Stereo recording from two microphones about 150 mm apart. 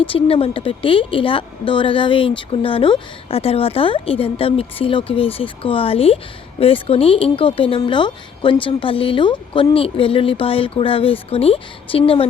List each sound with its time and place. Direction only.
0.0 s speech: 40° left (ahead or behind)